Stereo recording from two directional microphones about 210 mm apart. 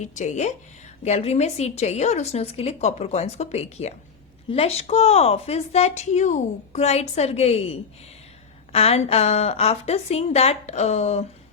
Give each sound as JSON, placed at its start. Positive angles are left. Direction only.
{"t": 0.0, "sound": "a woman's voice", "side_deg": 35}